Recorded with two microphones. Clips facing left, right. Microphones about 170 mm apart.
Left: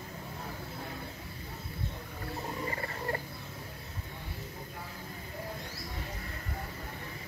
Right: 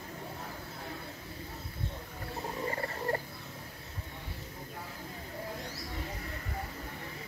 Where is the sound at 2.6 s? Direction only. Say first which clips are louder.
Right 5 dB; 35° right (ahead or behind).